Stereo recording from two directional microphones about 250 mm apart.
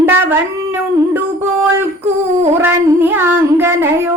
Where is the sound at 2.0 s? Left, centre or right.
Right.